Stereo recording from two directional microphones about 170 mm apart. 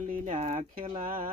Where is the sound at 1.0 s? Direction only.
55° right (ahead or behind).